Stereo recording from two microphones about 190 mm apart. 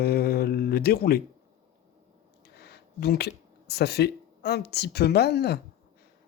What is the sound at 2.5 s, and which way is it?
Speech, 60° left (ahead or behind).